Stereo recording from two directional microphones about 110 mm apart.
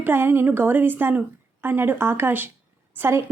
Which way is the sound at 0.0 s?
20° right (ahead or behind).